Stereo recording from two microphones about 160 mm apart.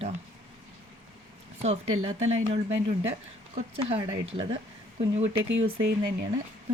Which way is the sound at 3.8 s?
35° right (ahead or behind).